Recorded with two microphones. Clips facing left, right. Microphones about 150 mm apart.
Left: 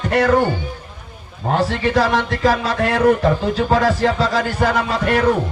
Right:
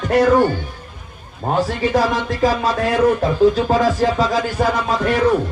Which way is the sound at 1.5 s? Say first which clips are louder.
Even; 70° left (ahead or behind).